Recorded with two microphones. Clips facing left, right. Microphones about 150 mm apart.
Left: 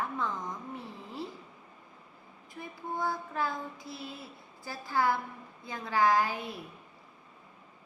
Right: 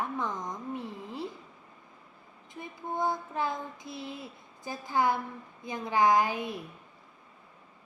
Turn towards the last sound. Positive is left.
turn(degrees=-20)  # may be behind; listen again after turning